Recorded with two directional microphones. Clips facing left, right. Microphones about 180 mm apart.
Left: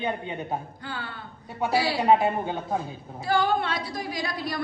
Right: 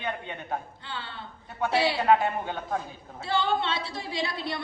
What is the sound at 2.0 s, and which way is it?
Speech, 20° left (ahead or behind).